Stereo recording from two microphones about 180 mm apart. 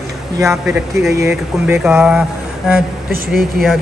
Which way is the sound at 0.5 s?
5° right (ahead or behind).